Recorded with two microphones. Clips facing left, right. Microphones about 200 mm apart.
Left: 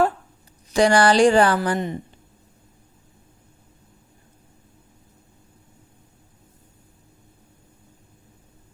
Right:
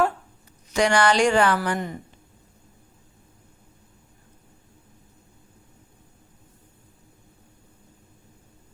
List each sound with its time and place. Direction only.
0.7 s a woman's voice: 35° left (ahead or behind)